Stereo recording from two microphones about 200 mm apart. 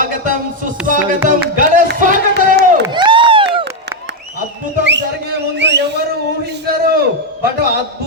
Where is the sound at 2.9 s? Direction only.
25° right (ahead or behind).